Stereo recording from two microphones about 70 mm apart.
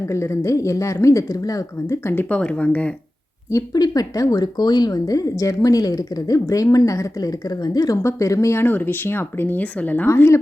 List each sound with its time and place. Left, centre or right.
0.0 s speech: left
2.3 s speech: centre
3.7 s speech: left
8.0 s speech: left
8.5 s speech: left